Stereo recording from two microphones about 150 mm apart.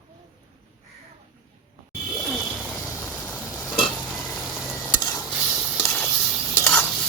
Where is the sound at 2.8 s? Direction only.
20° left (ahead or behind).